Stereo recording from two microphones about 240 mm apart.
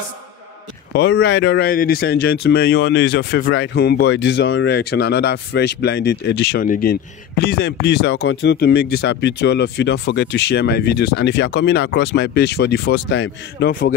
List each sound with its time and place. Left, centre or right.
0.9 s speech: left